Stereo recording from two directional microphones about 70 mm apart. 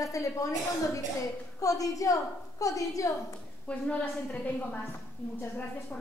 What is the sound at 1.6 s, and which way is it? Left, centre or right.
A woman's voice, left.